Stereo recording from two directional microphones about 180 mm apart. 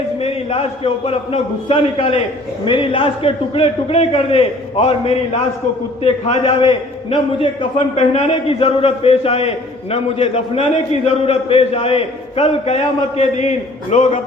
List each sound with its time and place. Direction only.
0.2 s a man's voice: 35° left (ahead or behind)